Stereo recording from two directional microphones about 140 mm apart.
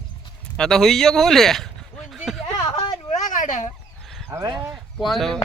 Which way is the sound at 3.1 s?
65° left (ahead or behind).